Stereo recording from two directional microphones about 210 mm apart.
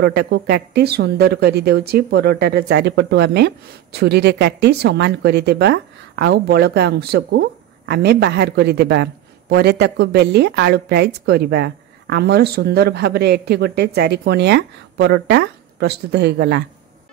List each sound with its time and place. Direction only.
0.0 s speech: 50° right (ahead or behind)